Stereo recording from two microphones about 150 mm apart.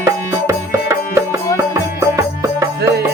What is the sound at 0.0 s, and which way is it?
Music, 20° right (ahead or behind).